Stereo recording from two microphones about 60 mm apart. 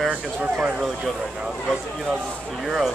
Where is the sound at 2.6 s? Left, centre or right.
Centre.